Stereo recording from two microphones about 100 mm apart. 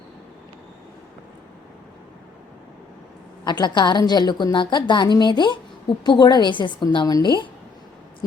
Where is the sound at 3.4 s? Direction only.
45° left (ahead or behind).